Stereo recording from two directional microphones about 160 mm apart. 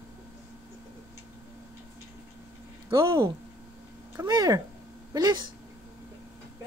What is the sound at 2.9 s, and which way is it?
Speech, 30° right (ahead or behind).